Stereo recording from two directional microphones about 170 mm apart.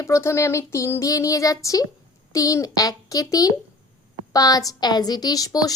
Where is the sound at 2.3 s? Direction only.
20° left (ahead or behind).